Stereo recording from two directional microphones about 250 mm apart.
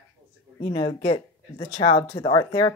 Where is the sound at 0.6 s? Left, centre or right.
Centre.